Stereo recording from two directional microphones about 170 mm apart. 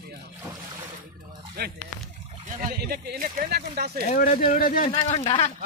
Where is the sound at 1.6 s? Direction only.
70° right (ahead or behind).